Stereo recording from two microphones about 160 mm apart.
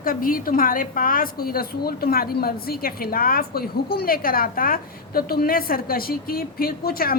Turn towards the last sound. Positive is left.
turn(degrees=70)  # may be behind; listen again after turning